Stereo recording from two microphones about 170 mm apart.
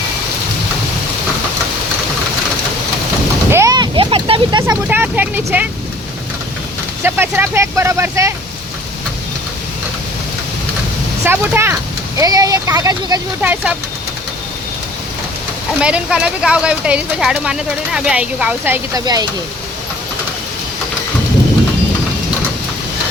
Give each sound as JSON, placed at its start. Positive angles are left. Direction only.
{"t": 3.5, "sound": "vehicle", "side_deg": -20}
{"t": 4.6, "sound": "vehicle", "side_deg": -15}
{"t": 7.0, "sound": "speech", "side_deg": -15}
{"t": 11.3, "sound": "speech", "side_deg": -15}
{"t": 13.4, "sound": "speech", "side_deg": -10}
{"t": 15.8, "sound": "speech", "side_deg": -5}